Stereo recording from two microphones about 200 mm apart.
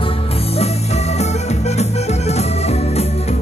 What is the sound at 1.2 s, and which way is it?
Music, 35° left (ahead or behind).